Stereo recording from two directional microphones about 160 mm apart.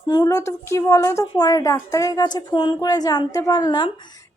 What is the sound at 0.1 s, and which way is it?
A woman's voice, 20° left (ahead or behind).